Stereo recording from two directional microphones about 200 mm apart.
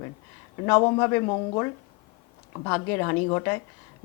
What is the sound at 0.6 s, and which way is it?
Speech, 20° left (ahead or behind).